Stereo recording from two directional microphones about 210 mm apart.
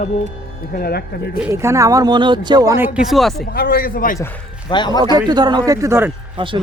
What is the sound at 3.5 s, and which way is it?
Speech, 45° left (ahead or behind).